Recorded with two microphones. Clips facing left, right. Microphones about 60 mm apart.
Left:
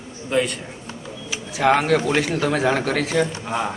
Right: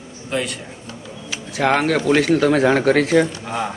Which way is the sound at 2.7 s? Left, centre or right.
Right.